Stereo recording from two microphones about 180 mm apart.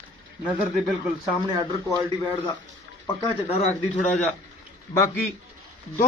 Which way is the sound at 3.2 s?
35° left (ahead or behind).